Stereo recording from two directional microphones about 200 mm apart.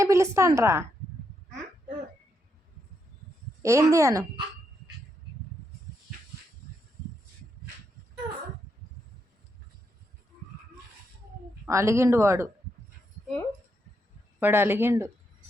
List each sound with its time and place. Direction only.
0.0 s a woman's voice: 15° right (ahead or behind)
3.6 s speech: 15° right (ahead or behind)
11.6 s speech: 15° right (ahead or behind)
14.3 s speech: 10° right (ahead or behind)